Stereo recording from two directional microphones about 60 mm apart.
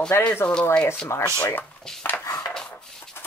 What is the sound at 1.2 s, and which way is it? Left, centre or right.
Speech, left.